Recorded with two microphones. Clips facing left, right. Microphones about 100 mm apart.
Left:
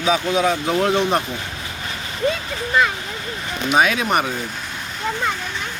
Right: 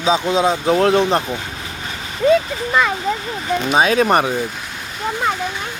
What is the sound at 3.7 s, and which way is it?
Speech, 30° right (ahead or behind).